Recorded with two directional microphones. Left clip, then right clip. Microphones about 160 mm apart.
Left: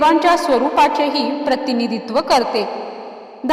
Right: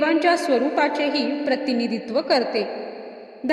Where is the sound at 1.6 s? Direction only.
65° left (ahead or behind).